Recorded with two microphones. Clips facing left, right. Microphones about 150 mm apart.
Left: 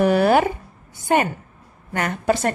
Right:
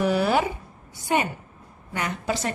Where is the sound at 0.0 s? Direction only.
55° left (ahead or behind).